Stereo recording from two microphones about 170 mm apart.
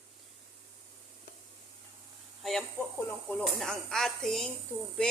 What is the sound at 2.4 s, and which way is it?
A woman's voice, centre (ahead or behind).